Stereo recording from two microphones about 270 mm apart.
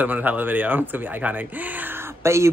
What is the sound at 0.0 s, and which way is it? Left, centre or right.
Speech, centre.